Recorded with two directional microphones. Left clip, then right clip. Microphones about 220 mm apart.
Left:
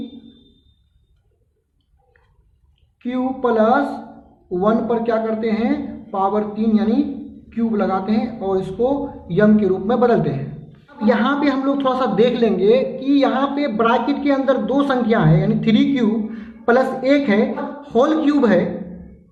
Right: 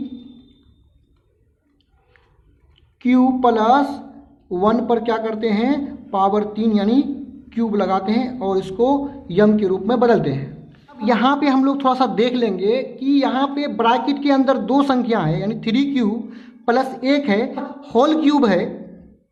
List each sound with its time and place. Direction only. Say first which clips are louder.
3.0 s a man's voice: right 5 dB; 45° right (ahead or behind)